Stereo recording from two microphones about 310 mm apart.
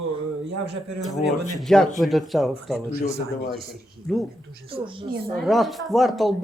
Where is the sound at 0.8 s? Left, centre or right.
Centre.